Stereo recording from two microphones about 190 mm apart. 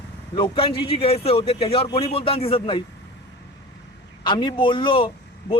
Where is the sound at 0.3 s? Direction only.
25° left (ahead or behind).